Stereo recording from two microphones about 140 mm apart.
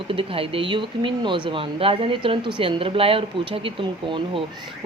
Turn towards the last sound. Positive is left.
turn(degrees=-35)  # may be behind; listen again after turning